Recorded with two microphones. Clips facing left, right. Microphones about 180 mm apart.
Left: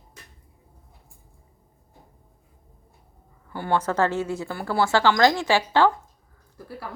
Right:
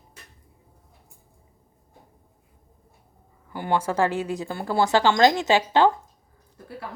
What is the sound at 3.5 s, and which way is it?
A woman's voice, 15° right (ahead or behind).